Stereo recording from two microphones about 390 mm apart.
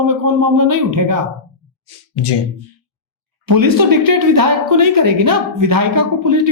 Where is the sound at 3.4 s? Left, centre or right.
Right.